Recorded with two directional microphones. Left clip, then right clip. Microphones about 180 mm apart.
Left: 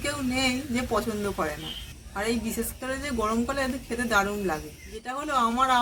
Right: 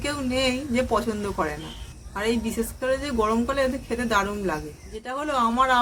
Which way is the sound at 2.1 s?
25° right (ahead or behind).